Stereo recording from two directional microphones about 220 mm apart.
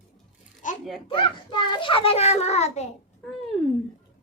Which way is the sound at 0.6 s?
35° left (ahead or behind).